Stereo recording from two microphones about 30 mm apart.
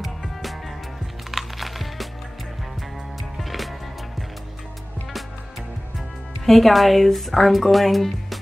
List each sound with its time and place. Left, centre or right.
0.0 s music: centre
3.3 s music: centre
6.4 s speech: centre